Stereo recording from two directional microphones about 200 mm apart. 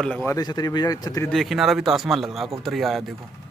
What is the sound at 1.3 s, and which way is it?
A man's voice, centre (ahead or behind).